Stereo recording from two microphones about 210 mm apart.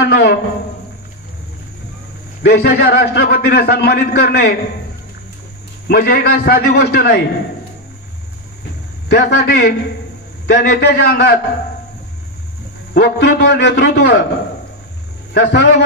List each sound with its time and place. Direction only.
0.0 s a man's voice: 50° left (ahead or behind)
2.4 s a man's voice: 50° left (ahead or behind)
5.9 s a man's voice: 45° left (ahead or behind)
9.1 s a man's voice: 50° left (ahead or behind)
12.9 s a man's voice: 50° left (ahead or behind)
15.3 s a man's voice: 50° left (ahead or behind)